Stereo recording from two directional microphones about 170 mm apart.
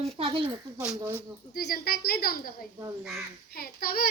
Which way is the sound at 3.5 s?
60° left (ahead or behind).